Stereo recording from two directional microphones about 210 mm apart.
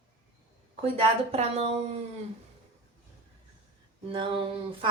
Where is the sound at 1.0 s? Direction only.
30° right (ahead or behind).